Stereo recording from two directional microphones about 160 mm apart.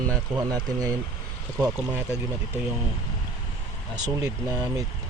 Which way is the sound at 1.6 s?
10° right (ahead or behind).